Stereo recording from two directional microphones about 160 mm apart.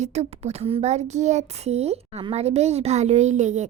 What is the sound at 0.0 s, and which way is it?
A child's voice, 45° right (ahead or behind).